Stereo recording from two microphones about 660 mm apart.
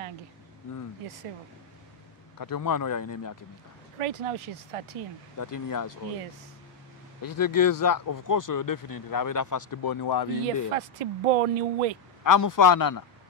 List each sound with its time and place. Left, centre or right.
2.3 s speech: left
4.0 s speech: right
5.4 s speech: left
7.2 s speech: left
10.7 s speech: right
12.2 s speech: left